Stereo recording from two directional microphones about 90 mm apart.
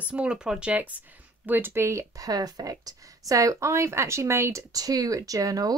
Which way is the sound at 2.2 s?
45° right (ahead or behind).